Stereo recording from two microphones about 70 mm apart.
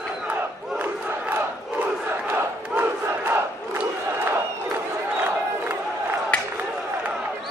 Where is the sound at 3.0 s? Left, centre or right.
Right.